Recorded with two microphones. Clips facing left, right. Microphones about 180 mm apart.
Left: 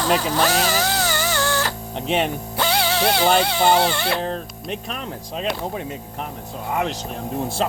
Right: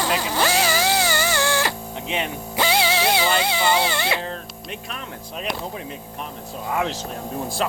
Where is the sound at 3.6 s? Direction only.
50° left (ahead or behind).